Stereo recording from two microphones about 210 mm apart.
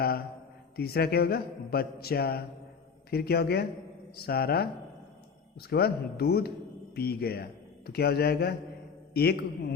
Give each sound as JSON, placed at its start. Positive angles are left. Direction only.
{"t": 0.8, "sound": "a man's voice", "side_deg": 50}